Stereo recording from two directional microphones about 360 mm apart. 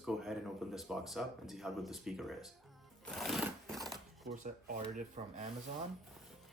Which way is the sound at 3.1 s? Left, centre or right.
Centre.